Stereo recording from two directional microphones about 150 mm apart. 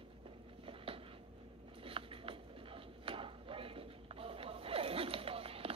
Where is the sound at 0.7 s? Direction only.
40° right (ahead or behind).